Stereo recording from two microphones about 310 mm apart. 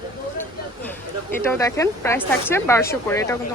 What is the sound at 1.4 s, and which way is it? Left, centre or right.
Speech, centre.